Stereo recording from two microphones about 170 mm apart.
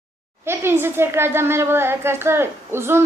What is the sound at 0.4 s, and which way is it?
A woman's voice, 15° right (ahead or behind).